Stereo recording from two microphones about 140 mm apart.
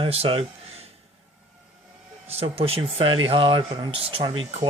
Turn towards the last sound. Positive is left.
turn(degrees=-35)  # may be behind; listen again after turning